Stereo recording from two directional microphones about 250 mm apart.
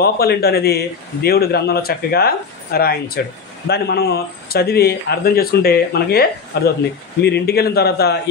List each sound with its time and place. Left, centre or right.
0.0 s a man's voice: left